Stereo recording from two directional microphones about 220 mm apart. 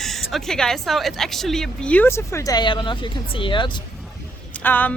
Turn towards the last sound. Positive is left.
turn(degrees=10)  # may be behind; listen again after turning